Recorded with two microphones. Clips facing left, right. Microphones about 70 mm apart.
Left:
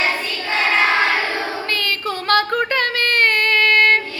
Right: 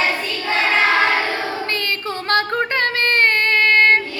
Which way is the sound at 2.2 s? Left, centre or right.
Right.